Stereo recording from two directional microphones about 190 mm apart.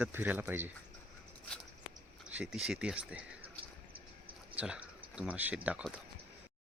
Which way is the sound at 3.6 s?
30° right (ahead or behind).